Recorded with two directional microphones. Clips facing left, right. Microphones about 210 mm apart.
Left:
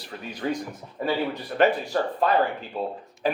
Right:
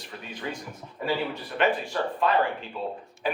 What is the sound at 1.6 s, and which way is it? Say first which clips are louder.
Speech: left 4 dB; 40° left (ahead or behind).